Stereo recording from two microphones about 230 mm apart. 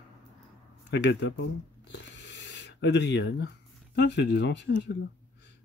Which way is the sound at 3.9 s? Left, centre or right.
Left.